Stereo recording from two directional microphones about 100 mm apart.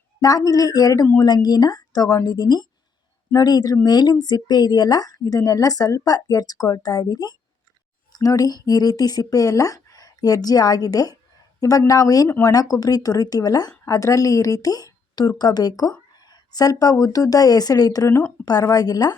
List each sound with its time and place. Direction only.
0.2 s speech: 40° left (ahead or behind)